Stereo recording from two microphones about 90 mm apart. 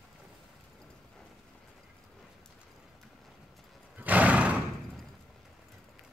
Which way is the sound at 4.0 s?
15° right (ahead or behind).